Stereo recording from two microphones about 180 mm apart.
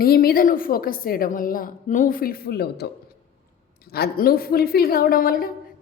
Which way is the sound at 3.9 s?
60° left (ahead or behind).